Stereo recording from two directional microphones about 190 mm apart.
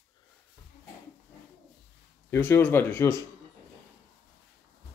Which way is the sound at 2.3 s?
10° left (ahead or behind).